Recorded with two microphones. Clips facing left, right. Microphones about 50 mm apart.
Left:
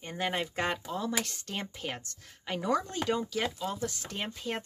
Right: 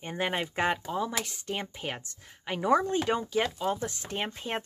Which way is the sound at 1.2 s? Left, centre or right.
Centre.